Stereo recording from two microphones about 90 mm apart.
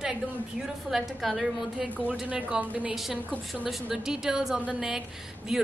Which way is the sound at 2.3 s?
15° right (ahead or behind).